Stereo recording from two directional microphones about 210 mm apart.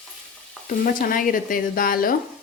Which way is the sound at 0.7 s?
40° left (ahead or behind).